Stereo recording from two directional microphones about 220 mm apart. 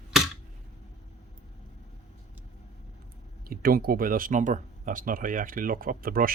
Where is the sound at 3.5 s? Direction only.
40° right (ahead or behind).